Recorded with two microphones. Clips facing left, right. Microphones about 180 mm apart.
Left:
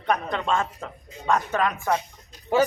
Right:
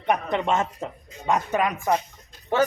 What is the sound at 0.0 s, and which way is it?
Speech, 20° right (ahead or behind).